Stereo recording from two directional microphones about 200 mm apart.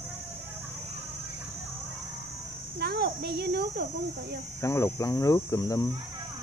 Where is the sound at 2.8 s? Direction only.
50° right (ahead or behind).